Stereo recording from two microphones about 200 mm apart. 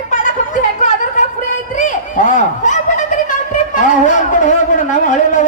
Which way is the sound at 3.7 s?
40° left (ahead or behind).